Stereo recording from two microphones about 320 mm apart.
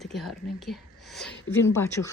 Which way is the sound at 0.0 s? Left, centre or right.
Centre.